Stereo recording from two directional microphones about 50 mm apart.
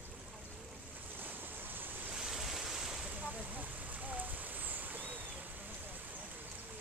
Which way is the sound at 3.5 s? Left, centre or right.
Right.